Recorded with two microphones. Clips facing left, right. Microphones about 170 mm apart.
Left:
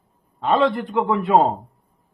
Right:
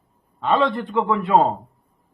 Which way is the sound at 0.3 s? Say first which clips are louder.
Left 1 dB; 10° left (ahead or behind).